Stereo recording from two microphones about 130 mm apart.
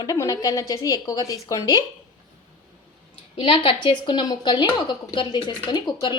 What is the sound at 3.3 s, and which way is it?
A woman's voice, 40° left (ahead or behind).